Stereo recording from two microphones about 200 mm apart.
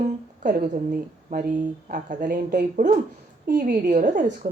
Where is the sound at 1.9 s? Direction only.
40° right (ahead or behind).